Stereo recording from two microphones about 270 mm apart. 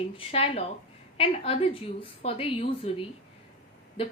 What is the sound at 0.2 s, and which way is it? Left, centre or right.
A woman's voice, left.